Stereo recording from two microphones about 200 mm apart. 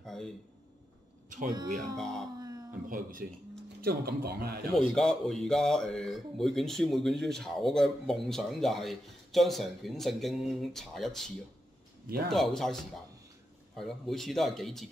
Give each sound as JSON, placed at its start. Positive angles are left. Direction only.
{"t": 0.0, "sound": "a sound", "side_deg": 0}
{"t": 1.5, "sound": "speech", "side_deg": -20}
{"t": 2.0, "sound": "speech", "side_deg": 0}
{"t": 2.3, "sound": "cat", "side_deg": -20}
{"t": 2.9, "sound": "speech", "side_deg": -45}
{"t": 4.7, "sound": "speech", "side_deg": 0}
{"t": 13.7, "sound": "speech", "side_deg": 0}